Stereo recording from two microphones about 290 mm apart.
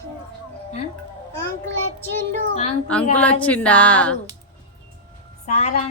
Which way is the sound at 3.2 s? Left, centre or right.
Centre.